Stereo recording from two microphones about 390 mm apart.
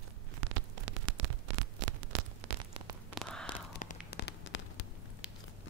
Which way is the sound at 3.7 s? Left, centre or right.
Centre.